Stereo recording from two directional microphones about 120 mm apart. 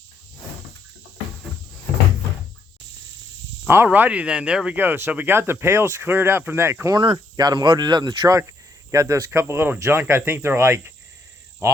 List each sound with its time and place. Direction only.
3.8 s speech: 10° right (ahead or behind)
6.9 s speech: 40° right (ahead or behind)